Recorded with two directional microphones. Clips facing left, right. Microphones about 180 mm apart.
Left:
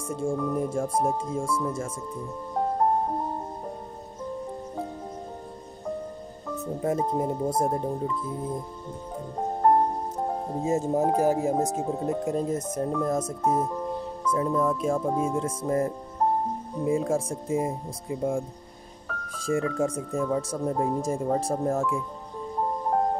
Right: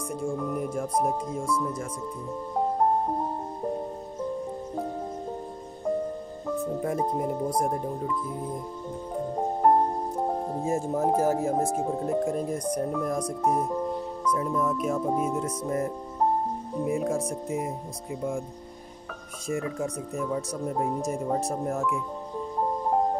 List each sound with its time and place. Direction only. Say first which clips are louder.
0.1 s speech: left 3 dB; 25° left (ahead or behind)
6.8 s speech: left 1 dB; 25° left (ahead or behind)
10.6 s speech: left 3 dB; 20° left (ahead or behind)
16.8 s speech: left 2 dB; 25° left (ahead or behind)
19.3 s speech: left 4 dB; 30° left (ahead or behind)